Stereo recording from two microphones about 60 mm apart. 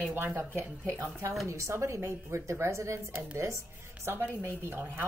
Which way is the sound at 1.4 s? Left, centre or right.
Right.